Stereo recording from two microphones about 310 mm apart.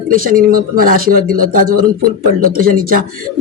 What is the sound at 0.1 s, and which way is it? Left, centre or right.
Speech, right.